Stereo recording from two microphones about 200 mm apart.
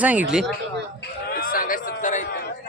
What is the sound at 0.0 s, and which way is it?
Speech, 10° right (ahead or behind).